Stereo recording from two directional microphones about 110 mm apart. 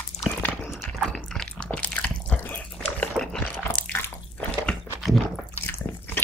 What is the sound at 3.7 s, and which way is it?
Drip, 10° left (ahead or behind).